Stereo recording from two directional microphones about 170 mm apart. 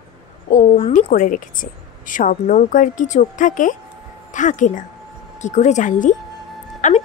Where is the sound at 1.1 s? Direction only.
50° left (ahead or behind).